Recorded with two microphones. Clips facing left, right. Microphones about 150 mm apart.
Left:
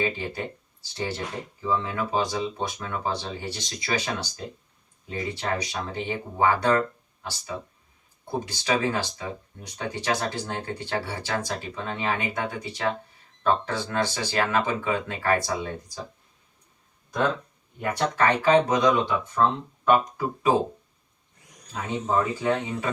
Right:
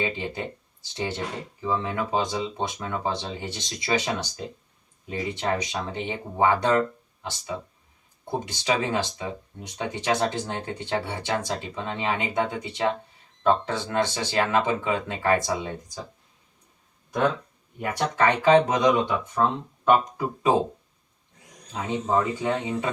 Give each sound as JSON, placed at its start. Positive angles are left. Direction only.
{"t": 0.0, "sound": "speech", "side_deg": -20}
{"t": 17.7, "sound": "speech", "side_deg": -20}
{"t": 21.7, "sound": "speech", "side_deg": -20}